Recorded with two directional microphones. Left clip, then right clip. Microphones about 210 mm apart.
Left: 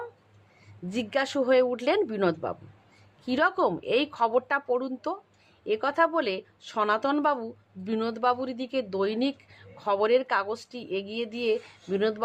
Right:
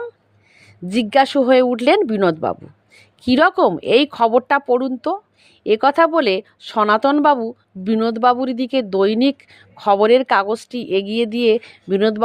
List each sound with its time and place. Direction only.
0.9 s a woman's voice: 35° right (ahead or behind)